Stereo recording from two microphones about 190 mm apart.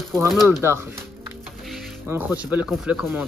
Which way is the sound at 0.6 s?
15° right (ahead or behind).